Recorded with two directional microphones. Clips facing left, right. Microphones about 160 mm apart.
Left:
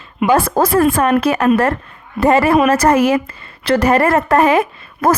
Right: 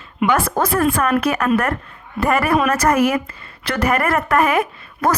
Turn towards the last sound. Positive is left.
turn(degrees=30)  # may be behind; listen again after turning